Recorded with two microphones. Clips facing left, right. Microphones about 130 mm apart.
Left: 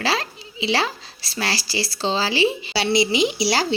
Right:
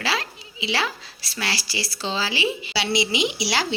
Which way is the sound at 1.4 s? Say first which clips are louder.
Left 4 dB; 35° left (ahead or behind).